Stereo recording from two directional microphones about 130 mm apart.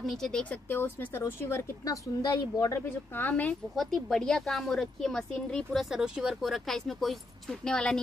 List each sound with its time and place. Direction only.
0.0 s speech: 5° left (ahead or behind); by 2.8 s 25° left (ahead or behind)
3.2 s speech: 10° left (ahead or behind)
3.7 s speech: centre (ahead or behind)